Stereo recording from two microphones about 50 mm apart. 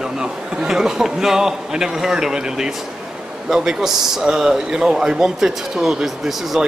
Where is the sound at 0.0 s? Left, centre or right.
Centre.